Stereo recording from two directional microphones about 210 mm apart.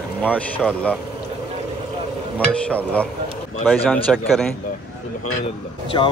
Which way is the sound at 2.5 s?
5° left (ahead or behind).